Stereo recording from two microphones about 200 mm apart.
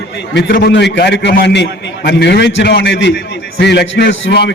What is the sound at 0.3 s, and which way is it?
A man's voice, 50° left (ahead or behind).